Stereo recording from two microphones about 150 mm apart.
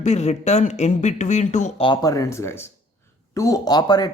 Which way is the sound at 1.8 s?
30° left (ahead or behind).